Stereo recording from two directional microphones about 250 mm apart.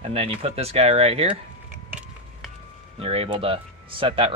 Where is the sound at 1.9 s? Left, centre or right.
Centre.